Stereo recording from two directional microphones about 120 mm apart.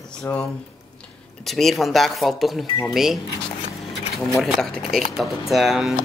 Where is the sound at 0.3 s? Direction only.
20° left (ahead or behind).